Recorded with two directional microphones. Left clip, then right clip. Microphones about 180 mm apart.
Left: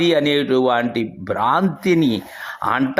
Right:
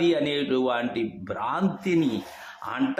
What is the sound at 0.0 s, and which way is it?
Speech, 35° left (ahead or behind).